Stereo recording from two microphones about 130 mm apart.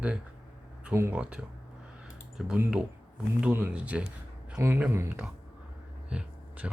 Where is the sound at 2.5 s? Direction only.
10° right (ahead or behind).